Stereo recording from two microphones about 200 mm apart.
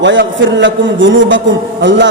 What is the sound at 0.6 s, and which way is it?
Speech, 70° right (ahead or behind).